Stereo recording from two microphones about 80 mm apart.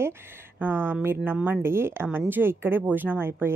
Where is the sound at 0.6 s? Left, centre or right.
Right.